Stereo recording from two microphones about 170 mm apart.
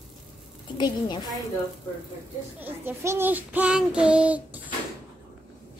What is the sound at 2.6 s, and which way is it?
Speech, 15° right (ahead or behind).